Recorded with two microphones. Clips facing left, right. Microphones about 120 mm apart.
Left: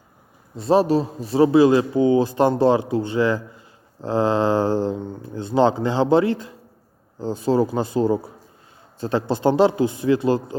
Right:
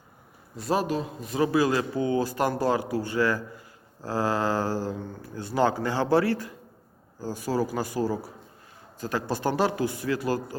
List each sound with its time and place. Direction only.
0.5 s a man's voice: 25° left (ahead or behind)